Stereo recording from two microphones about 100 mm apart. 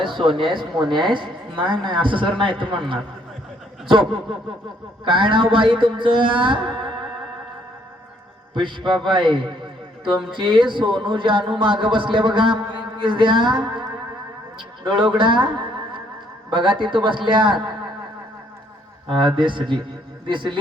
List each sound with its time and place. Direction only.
0.0 s speech: 55° right (ahead or behind)
3.8 s a man's voice: 55° right (ahead or behind)
8.5 s speech: 50° right (ahead or behind)
14.8 s a man's voice: 55° right (ahead or behind)
19.0 s speech: 55° right (ahead or behind)